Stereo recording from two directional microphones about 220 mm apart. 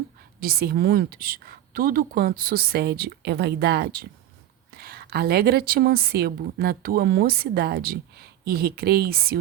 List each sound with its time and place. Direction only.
0.3 s a woman's voice: 45° right (ahead or behind)